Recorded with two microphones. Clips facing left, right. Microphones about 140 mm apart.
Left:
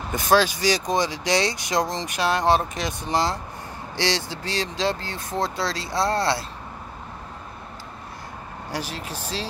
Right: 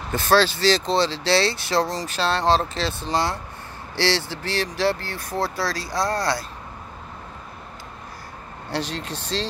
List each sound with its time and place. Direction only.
0.1 s speech: 15° left (ahead or behind)
8.7 s speech: 10° left (ahead or behind)